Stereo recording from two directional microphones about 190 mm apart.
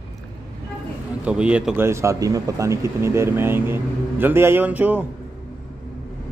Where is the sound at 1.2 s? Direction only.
5° right (ahead or behind).